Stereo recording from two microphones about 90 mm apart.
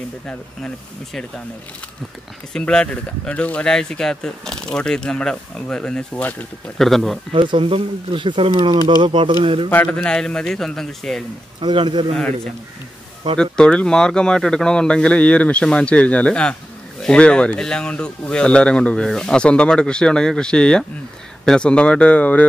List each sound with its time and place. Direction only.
2.5 s a man's voice: 10° left (ahead or behind)
7.3 s speech: 70° right (ahead or behind)
9.7 s a man's voice: 20° left (ahead or behind)
11.7 s speech: 60° right (ahead or behind)
13.4 s a man's voice: 10° left (ahead or behind)